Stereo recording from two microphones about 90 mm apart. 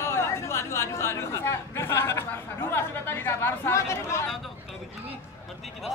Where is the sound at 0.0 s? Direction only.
30° left (ahead or behind).